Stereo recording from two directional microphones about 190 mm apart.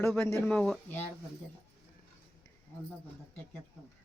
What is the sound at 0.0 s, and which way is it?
Speech, 10° left (ahead or behind).